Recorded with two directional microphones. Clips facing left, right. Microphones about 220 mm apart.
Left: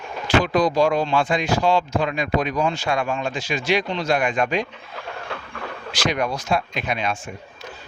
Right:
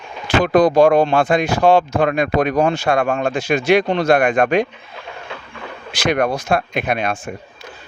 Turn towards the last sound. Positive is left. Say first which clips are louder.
# right 5 dB
turn(degrees=-55)  # may be behind; listen again after turning